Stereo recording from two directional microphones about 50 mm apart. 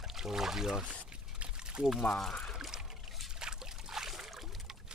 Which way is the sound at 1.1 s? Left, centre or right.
Centre.